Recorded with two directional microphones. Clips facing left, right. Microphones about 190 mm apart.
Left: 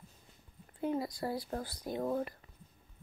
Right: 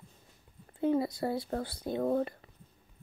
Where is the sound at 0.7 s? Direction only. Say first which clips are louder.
Right 6 dB; 25° right (ahead or behind).